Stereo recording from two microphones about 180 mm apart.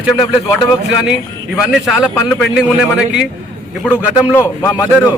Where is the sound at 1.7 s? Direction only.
Centre (ahead or behind).